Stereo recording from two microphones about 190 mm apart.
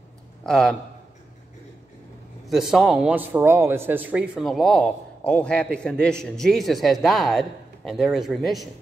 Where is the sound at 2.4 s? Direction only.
Centre (ahead or behind).